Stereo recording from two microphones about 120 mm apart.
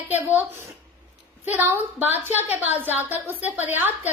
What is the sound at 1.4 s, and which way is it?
A woman's voice, 15° right (ahead or behind).